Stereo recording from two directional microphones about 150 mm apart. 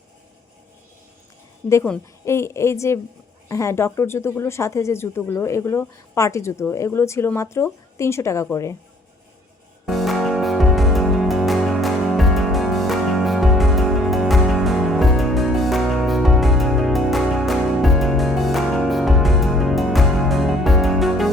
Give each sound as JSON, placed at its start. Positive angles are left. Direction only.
{"t": 2.2, "sound": "speech", "side_deg": 20}
{"t": 9.8, "sound": "music", "side_deg": 0}